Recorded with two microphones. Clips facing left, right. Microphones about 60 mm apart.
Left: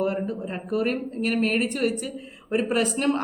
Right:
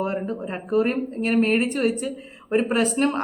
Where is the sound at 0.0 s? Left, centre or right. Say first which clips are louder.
Even; right.